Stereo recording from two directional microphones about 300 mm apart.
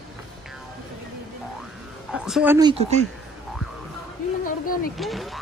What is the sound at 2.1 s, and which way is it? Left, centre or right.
Speech, centre.